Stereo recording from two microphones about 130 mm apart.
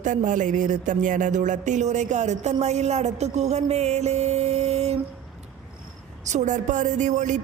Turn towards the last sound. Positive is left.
turn(degrees=-65)  # may be behind; listen again after turning